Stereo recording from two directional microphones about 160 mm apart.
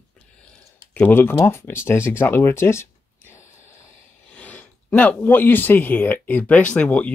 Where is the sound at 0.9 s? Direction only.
15° left (ahead or behind).